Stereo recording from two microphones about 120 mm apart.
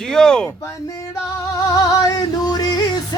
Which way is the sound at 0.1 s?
5° left (ahead or behind).